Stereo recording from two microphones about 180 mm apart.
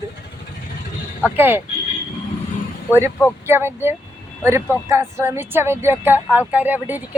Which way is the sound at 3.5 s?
15° right (ahead or behind).